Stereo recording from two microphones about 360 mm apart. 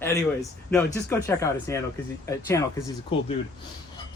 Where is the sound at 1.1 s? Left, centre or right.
Centre.